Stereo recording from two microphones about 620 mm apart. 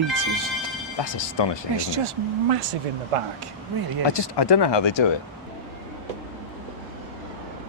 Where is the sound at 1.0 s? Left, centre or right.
Left.